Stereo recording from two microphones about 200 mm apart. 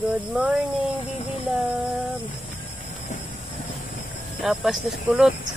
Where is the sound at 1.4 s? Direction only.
10° right (ahead or behind).